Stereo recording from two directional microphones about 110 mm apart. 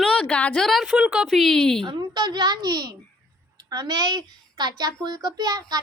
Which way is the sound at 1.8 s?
40° right (ahead or behind).